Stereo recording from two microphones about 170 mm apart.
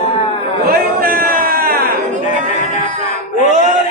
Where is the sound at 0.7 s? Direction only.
60° right (ahead or behind).